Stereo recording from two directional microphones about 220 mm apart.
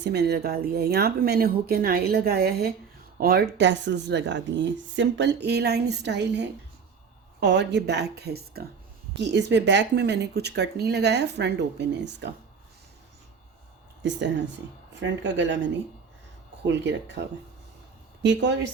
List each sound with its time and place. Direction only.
0.0 s speech: 50° right (ahead or behind)
15.0 s a woman's voice: 55° right (ahead or behind)